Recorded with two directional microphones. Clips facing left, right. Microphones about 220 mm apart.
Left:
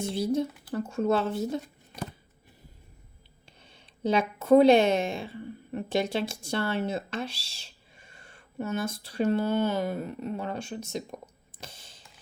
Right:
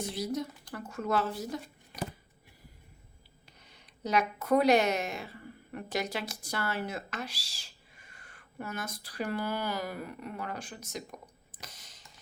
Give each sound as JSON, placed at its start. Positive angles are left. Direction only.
{"t": 0.0, "sound": "speech", "side_deg": 25}
{"t": 3.6, "sound": "speech", "side_deg": 30}
{"t": 11.5, "sound": "a sound", "side_deg": 30}